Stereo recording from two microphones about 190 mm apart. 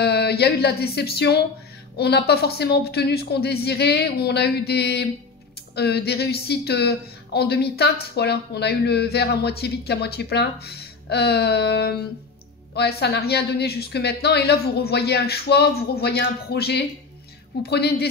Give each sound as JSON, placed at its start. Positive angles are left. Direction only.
{"t": 0.0, "sound": "a woman's voice", "side_deg": 60}